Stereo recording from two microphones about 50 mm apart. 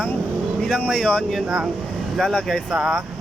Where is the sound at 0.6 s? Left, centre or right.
Centre.